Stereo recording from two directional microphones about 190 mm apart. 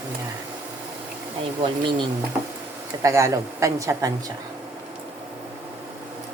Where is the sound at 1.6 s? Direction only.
25° right (ahead or behind).